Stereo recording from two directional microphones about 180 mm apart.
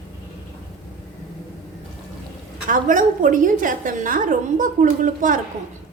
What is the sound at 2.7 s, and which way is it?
A woman's voice, 45° right (ahead or behind).